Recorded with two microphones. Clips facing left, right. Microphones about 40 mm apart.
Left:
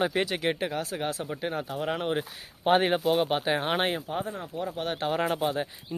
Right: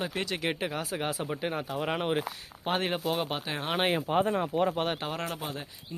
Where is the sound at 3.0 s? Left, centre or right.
Centre.